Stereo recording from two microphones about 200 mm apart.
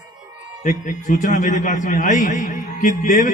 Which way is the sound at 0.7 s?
40° left (ahead or behind).